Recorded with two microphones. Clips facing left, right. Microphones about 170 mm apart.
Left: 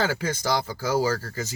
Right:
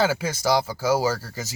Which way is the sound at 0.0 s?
10° right (ahead or behind).